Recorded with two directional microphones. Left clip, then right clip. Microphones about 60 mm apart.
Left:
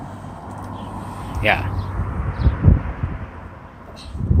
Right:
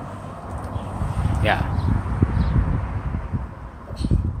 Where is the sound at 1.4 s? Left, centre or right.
Centre.